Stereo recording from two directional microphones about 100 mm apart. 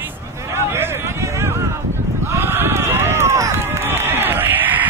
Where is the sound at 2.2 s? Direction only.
25° right (ahead or behind).